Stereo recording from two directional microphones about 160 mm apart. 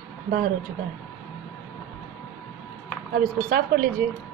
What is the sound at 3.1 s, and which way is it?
Speech, 75° right (ahead or behind).